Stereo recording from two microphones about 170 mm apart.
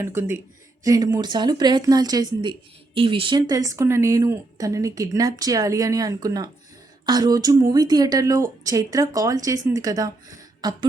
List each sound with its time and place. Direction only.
0.0 s speech: 15° right (ahead or behind)